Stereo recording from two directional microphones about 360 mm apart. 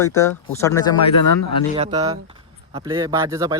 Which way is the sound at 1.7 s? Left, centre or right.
Centre.